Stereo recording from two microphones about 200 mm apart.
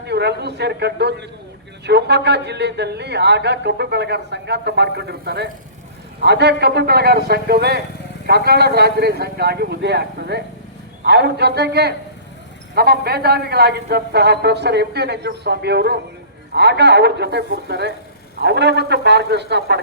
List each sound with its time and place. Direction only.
0.0 s a man's voice: 55° right (ahead or behind)